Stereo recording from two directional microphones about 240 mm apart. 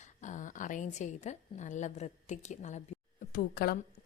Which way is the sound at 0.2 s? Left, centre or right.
Left.